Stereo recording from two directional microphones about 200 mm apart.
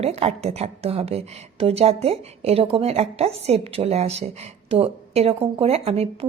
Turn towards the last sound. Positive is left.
turn(degrees=-30)  # may be behind; listen again after turning